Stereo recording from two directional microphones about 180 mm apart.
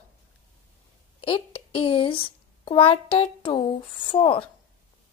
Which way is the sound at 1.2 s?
30° left (ahead or behind).